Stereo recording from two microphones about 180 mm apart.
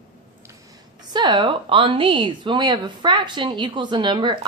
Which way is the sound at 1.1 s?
25° right (ahead or behind).